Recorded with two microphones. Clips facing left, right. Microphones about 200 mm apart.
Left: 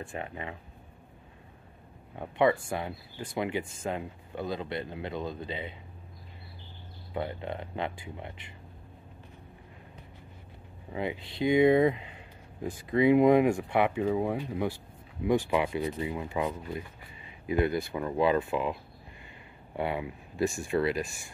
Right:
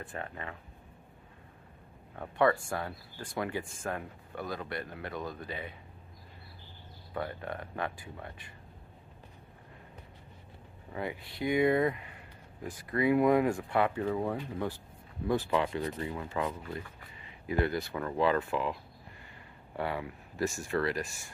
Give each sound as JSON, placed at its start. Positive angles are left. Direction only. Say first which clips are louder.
{"t": 0.1, "sound": "speech", "louder": "left 3 dB", "side_deg": 15}
{"t": 2.1, "sound": "speech", "louder": "left 2 dB", "side_deg": 20}
{"t": 7.2, "sound": "speech", "louder": "left 3 dB", "side_deg": 20}
{"t": 10.9, "sound": "speech", "louder": "left 4 dB", "side_deg": 20}
{"t": 19.8, "sound": "speech", "louder": "left 3 dB", "side_deg": 20}